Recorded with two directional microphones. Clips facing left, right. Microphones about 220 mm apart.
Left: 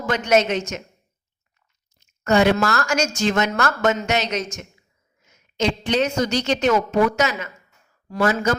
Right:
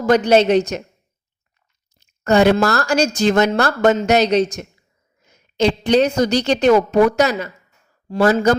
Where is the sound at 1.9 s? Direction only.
35° right (ahead or behind).